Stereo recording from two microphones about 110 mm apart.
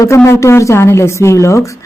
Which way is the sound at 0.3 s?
25° left (ahead or behind).